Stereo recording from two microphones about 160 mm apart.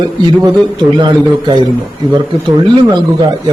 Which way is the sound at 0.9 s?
30° right (ahead or behind).